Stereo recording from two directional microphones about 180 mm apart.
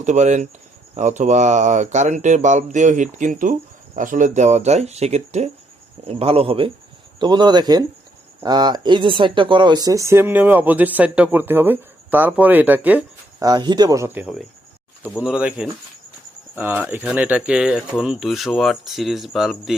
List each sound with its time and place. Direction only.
0.0 s speech: 40° right (ahead or behind); by 13.1 s 10° right (ahead or behind)
13.4 s speech: 25° right (ahead or behind); by 19.7 s centre (ahead or behind)